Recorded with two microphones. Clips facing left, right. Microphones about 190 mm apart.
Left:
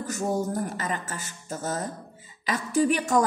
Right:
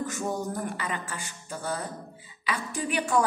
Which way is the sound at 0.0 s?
40° left (ahead or behind).